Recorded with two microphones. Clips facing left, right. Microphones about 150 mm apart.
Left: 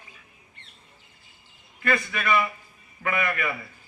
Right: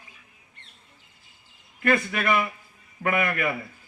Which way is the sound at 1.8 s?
50° right (ahead or behind).